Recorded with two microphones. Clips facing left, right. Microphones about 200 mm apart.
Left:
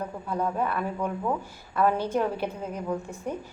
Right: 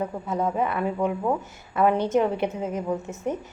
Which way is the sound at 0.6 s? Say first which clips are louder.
Right 4 dB; 20° right (ahead or behind).